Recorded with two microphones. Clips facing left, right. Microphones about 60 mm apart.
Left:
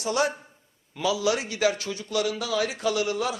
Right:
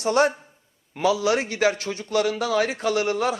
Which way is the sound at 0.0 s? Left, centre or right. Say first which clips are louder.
Right 5 dB; right.